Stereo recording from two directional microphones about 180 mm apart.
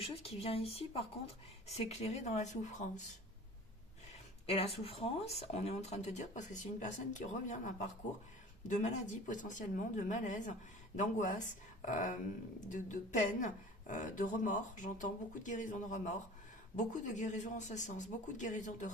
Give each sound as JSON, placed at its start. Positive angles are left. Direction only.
{"t": 0.0, "sound": "speech", "side_deg": 30}
{"t": 4.4, "sound": "speech", "side_deg": 35}